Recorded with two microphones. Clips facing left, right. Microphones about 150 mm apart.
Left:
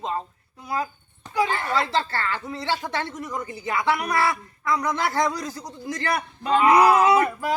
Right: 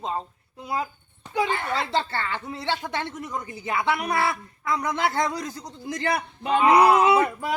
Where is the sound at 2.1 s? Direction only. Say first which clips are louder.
Left 1 dB; 20° right (ahead or behind).